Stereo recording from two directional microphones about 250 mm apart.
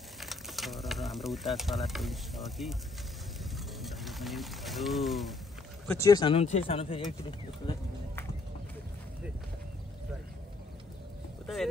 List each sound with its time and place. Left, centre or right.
0.2 s a sound: centre
5.9 s speech: centre
11.4 s speech: centre